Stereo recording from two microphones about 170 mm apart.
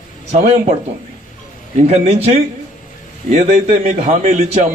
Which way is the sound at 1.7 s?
40° right (ahead or behind).